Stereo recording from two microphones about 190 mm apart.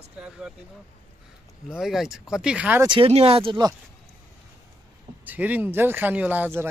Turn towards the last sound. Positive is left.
turn(degrees=-10)  # may be behind; listen again after turning